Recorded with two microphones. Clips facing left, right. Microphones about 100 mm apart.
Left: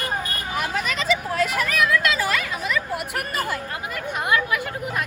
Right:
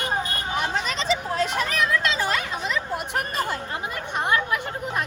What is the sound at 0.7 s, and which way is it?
A child's voice, 30° right (ahead or behind).